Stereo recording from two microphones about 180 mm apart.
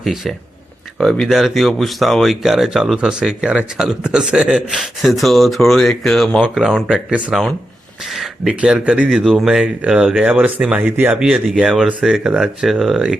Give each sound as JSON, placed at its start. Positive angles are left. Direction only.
{"t": 0.0, "sound": "speech", "side_deg": 0}